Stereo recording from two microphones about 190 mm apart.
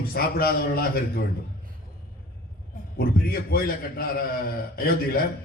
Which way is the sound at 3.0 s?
50° left (ahead or behind).